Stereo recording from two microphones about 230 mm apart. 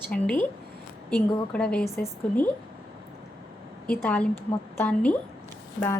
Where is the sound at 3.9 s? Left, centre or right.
Centre.